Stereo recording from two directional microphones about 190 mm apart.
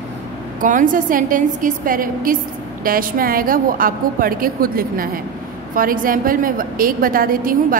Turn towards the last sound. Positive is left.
turn(degrees=-45)  # may be behind; listen again after turning